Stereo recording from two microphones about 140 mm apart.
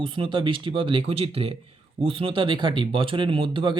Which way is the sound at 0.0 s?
40° right (ahead or behind).